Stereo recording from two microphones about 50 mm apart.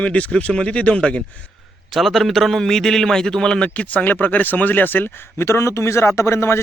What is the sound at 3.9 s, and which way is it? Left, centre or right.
Speech, left.